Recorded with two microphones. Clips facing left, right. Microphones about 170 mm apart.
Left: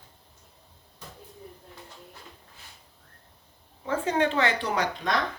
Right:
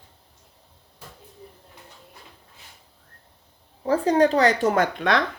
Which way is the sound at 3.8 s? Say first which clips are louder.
Right 7 dB; 35° right (ahead or behind).